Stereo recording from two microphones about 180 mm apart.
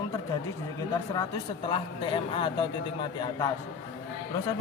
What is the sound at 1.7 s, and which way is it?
A man's voice, 30° left (ahead or behind).